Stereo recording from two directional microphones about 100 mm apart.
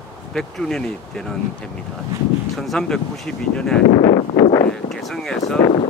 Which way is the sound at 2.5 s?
5° left (ahead or behind).